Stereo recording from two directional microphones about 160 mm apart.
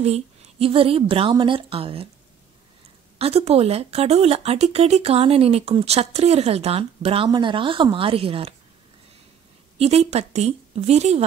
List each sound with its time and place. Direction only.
0.0 s a woman's voice: 40° right (ahead or behind)
3.2 s speech: 40° right (ahead or behind)
9.8 s a woman's voice: 40° right (ahead or behind)